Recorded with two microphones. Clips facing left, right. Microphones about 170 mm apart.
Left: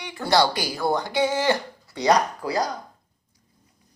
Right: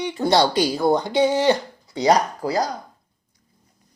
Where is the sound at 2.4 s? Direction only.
35° right (ahead or behind).